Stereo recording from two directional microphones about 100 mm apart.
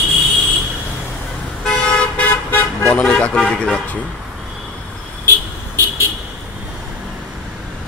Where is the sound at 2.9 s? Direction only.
10° left (ahead or behind).